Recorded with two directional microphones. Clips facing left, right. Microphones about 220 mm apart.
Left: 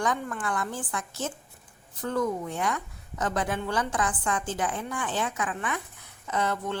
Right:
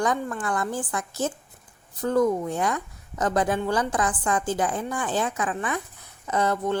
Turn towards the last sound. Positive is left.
turn(degrees=-40)  # may be behind; listen again after turning